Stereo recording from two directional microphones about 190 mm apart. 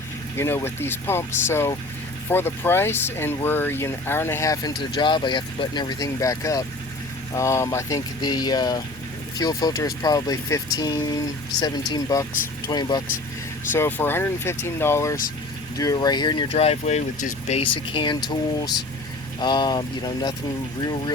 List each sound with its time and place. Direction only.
0.3 s speech: 10° left (ahead or behind)
19.4 s speech: 25° left (ahead or behind)